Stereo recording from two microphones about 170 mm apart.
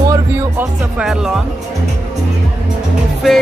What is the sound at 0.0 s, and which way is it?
Music, 20° right (ahead or behind).